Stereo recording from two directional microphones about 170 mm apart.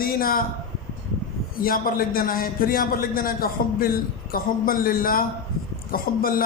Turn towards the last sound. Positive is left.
turn(degrees=60)  # may be behind; listen again after turning